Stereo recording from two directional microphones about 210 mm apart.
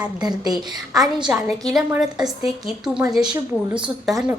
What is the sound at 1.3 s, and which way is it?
A woman's voice, 5° right (ahead or behind).